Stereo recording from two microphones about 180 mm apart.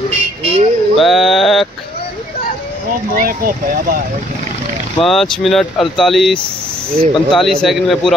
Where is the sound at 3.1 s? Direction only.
50° right (ahead or behind).